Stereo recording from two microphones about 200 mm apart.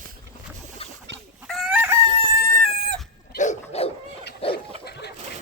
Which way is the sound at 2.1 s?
35° right (ahead or behind).